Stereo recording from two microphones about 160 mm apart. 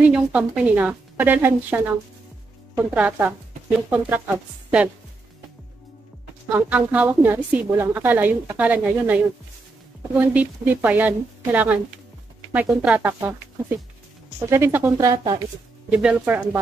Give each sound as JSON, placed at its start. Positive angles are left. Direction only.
{"t": 0.0, "sound": "a woman's voice", "side_deg": -5}
{"t": 6.5, "sound": "a woman's voice", "side_deg": -10}
{"t": 15.9, "sound": "a woman's voice", "side_deg": -10}